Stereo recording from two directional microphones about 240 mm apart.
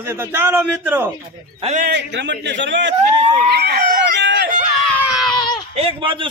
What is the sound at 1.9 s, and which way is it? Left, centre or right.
Speech, right.